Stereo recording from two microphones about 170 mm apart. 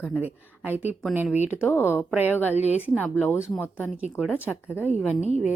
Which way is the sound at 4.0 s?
5° right (ahead or behind).